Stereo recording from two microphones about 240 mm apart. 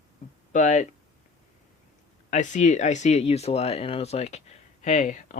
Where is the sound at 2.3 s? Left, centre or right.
Left.